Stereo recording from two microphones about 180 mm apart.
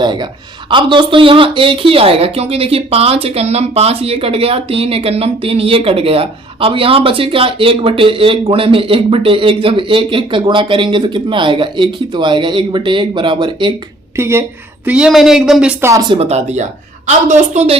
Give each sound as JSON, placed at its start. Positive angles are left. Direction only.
{"t": 0.0, "sound": "a woman's voice", "side_deg": -25}
{"t": 14.2, "sound": "a woman's voice", "side_deg": -15}
{"t": 15.8, "sound": "speech", "side_deg": -20}
{"t": 16.1, "sound": "a woman's voice", "side_deg": -35}